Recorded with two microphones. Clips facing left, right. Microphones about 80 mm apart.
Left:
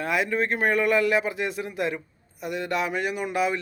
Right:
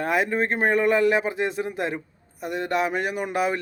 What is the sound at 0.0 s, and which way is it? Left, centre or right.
A man's voice, right.